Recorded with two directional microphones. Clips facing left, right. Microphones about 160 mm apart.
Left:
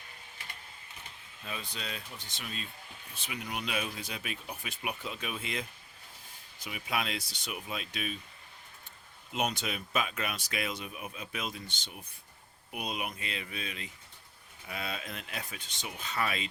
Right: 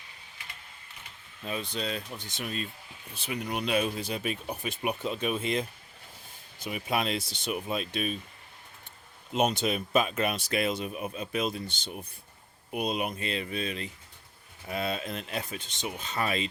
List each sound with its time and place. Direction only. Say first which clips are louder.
1.5 s speech: right 8 dB; 30° right (ahead or behind)
2.1 s speech: right 7 dB; 50° right (ahead or behind)
3.2 s speech: right 7 dB; 35° right (ahead or behind)
6.7 s speech: right 5 dB; 35° right (ahead or behind)
9.3 s speech: right 7 dB; 25° right (ahead or behind)